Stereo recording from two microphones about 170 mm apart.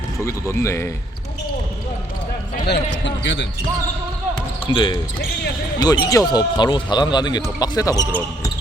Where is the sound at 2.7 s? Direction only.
85° left.